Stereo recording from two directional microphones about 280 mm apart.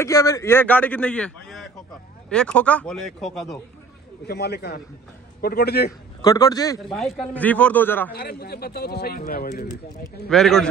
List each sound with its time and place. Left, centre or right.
0.0 s a man's voice: centre
4.3 s a man's voice: left
6.2 s a man's voice: centre
6.9 s a man's voice: centre
8.1 s a man's voice: left
10.2 s a man's voice: centre